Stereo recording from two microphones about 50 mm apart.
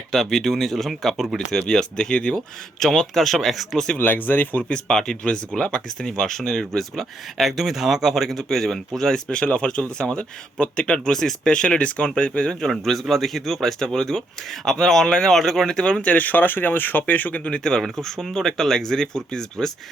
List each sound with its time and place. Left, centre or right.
0.1 s speech: centre
1.5 s speech: centre
3.9 s speech: left
4.7 s speech: centre
9.3 s speech: left
11.1 s speech: centre
11.4 s speech: centre
12.8 s speech: centre; by 17.6 s left
17.6 s speech: centre